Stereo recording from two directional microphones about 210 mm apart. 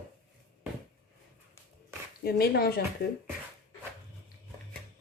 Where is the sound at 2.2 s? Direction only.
45° left (ahead or behind).